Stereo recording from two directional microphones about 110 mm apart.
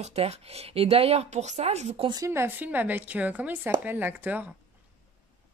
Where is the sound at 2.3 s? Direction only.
20° right (ahead or behind).